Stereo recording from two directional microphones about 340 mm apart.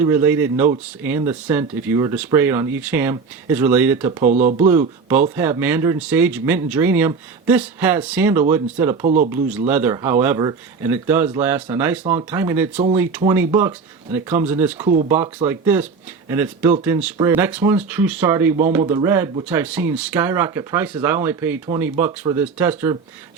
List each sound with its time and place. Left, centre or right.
0.0 s speech: centre
4.2 s speech: right
4.5 s speech: centre
9.0 s speech: right
9.3 s speech: centre
14.8 s speech: centre
15.4 s speech: centre